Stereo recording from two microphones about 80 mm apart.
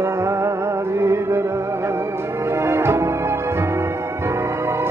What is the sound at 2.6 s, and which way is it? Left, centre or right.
Music, right.